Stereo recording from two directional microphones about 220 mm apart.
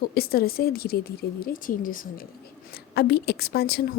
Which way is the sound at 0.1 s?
45° left (ahead or behind).